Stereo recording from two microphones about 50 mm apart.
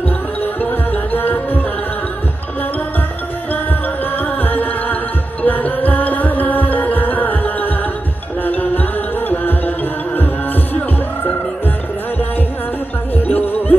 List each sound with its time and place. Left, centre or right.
0.4 s music: left
4.2 s music: left
13.1 s music: left